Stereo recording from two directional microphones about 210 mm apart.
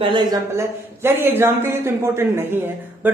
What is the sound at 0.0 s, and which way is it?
A man's voice, 20° right (ahead or behind).